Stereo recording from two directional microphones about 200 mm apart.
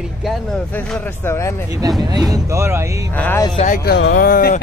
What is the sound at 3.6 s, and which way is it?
Speech, 40° left (ahead or behind).